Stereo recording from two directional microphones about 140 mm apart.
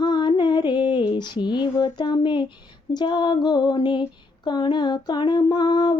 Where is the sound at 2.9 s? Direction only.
30° left (ahead or behind).